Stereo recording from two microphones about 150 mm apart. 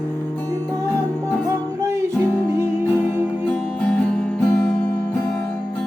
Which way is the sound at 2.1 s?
10° left (ahead or behind).